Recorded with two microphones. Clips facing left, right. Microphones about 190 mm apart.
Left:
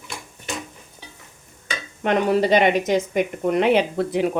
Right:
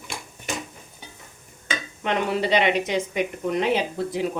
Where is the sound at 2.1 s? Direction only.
45° left (ahead or behind); by 4.3 s 60° left (ahead or behind).